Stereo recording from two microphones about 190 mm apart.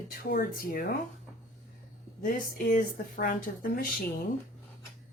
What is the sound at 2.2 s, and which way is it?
Speech, 45° left (ahead or behind).